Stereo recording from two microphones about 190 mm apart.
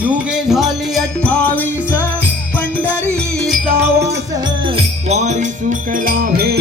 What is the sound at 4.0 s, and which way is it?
Music, 20° right (ahead or behind).